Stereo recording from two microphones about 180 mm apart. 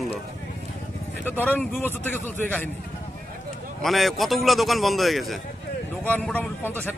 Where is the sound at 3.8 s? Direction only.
Centre (ahead or behind).